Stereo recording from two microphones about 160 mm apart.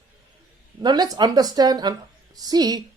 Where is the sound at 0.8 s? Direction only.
25° right (ahead or behind).